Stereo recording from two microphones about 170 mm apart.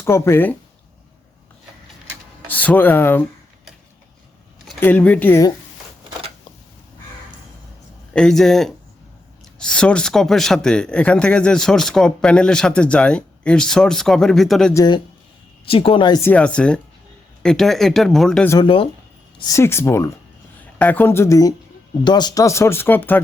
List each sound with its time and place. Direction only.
0.0 s speech: 15° left (ahead or behind)
2.5 s speech: 10° left (ahead or behind)
4.8 s speech: 10° left (ahead or behind)
8.1 s speech: 5° left (ahead or behind)
14.7 s speech: 20° left (ahead or behind)
15.6 s a woman's voice: 30° left (ahead or behind)
16.2 s speech: 10° left (ahead or behind)
18.6 s a woman's voice: 30° left (ahead or behind)
19.4 s speech: 20° left (ahead or behind)